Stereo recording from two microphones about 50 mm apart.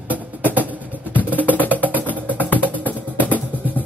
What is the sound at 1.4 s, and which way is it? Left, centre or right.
Music, left.